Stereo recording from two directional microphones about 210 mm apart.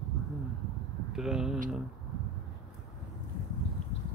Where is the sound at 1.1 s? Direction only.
5° right (ahead or behind).